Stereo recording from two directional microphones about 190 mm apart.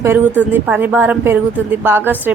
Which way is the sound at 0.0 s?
10° right (ahead or behind).